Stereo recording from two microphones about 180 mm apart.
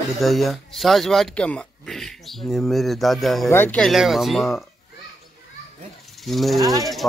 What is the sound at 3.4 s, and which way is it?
Speech, 10° left (ahead or behind).